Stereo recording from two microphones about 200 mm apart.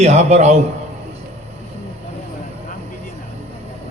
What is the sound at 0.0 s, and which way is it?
Speech, 35° right (ahead or behind).